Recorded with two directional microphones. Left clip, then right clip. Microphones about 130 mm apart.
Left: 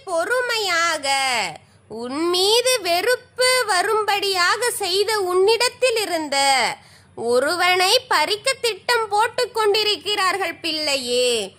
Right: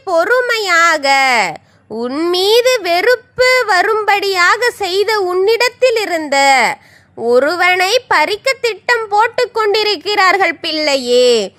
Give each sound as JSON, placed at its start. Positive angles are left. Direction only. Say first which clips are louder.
{"t": 0.0, "sound": "a sound", "louder": "right 9 dB", "side_deg": -50}
{"t": 2.0, "sound": "a child's voice", "louder": "right 6 dB", "side_deg": -30}
{"t": 2.3, "sound": "a child's voice", "louder": "right 7 dB", "side_deg": -50}